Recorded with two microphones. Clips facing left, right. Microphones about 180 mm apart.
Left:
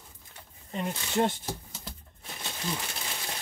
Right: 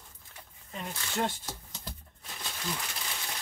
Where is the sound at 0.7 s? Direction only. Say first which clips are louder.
Left 6 dB; 25° left (ahead or behind).